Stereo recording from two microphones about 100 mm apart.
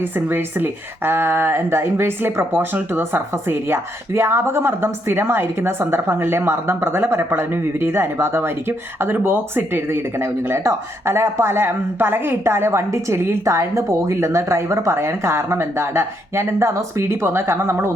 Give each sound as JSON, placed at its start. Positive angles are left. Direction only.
{"t": 0.3, "sound": "speech", "side_deg": -20}